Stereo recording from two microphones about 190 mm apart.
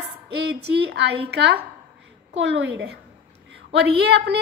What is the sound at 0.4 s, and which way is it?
A woman's voice, 60° right (ahead or behind).